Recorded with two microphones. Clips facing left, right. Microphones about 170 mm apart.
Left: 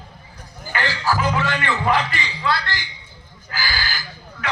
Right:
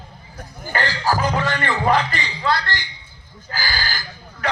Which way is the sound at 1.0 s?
40° right (ahead or behind).